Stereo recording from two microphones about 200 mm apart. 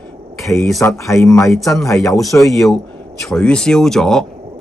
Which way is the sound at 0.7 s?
15° left (ahead or behind).